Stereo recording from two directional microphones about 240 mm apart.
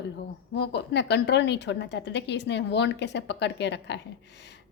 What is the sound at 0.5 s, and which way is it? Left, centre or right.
A woman's voice, left.